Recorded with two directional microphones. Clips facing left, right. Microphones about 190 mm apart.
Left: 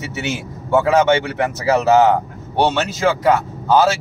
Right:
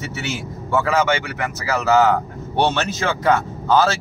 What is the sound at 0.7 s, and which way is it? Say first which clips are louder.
Speech: left 5 dB; 25° left (ahead or behind).